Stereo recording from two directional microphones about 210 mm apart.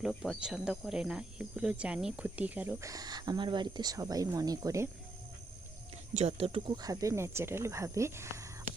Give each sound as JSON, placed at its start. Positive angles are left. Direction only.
{"t": 0.0, "sound": "speech", "side_deg": 0}
{"t": 6.1, "sound": "speech", "side_deg": -30}